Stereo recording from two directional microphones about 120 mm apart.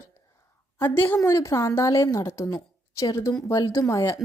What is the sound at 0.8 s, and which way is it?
A woman's voice, 15° left (ahead or behind).